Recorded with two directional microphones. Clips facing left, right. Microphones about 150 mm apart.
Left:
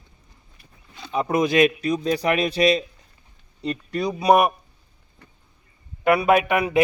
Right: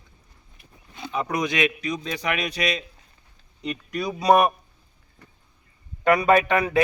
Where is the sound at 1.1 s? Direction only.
30° left (ahead or behind).